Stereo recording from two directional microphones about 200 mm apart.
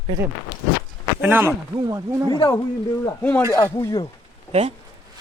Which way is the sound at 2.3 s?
15° left (ahead or behind).